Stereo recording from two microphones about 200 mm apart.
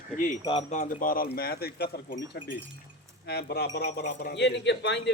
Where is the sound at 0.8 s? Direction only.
45° left (ahead or behind).